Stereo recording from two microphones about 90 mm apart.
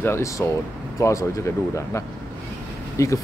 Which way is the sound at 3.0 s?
35° left (ahead or behind).